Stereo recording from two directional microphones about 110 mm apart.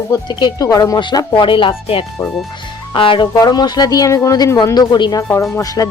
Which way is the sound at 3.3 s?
35° left (ahead or behind).